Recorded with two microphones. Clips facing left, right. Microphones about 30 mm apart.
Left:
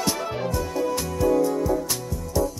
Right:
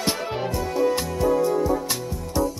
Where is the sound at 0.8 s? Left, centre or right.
Right.